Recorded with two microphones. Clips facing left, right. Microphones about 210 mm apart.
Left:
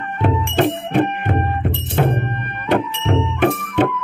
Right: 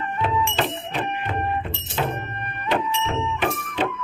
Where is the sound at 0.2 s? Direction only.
60° left (ahead or behind).